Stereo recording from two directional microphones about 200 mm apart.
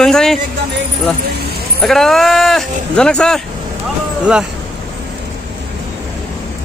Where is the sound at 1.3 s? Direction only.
50° right (ahead or behind).